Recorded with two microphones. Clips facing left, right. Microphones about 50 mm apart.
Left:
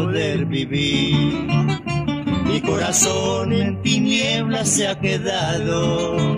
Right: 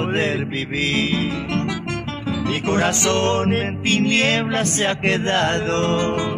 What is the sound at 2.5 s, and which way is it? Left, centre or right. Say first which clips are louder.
Music: right 3 dB; right.